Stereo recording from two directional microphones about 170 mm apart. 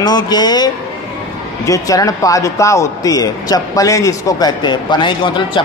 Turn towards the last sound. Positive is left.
turn(degrees=30)  # may be behind; listen again after turning